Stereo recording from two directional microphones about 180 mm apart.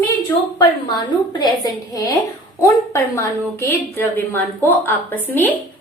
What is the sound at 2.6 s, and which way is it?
A woman's voice, 15° left (ahead or behind).